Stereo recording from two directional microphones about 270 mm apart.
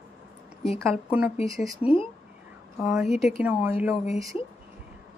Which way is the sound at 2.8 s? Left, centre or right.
Centre.